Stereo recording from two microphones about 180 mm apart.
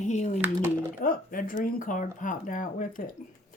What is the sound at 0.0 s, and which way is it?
Speech, 40° left (ahead or behind).